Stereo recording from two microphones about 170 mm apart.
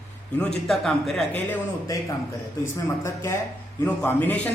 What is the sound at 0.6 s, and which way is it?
Speech, centre (ahead or behind).